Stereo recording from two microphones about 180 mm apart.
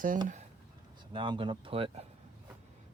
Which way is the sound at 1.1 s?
25° right (ahead or behind).